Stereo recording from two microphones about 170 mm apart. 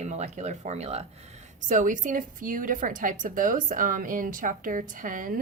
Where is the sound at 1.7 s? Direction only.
50° right (ahead or behind).